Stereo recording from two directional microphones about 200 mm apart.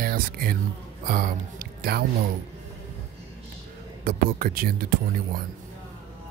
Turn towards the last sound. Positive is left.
turn(degrees=-45)  # may be behind; listen again after turning